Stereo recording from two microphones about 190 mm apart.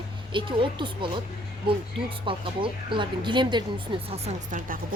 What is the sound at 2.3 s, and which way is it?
Speech, 25° right (ahead or behind).